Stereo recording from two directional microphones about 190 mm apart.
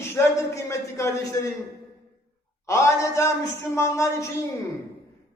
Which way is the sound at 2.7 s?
15° left (ahead or behind).